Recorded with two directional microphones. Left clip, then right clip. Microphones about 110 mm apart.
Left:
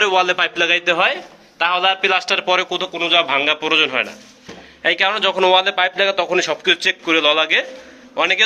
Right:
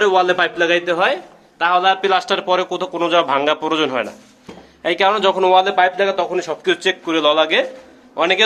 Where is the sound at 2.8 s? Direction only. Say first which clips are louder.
Even; 75° right (ahead or behind).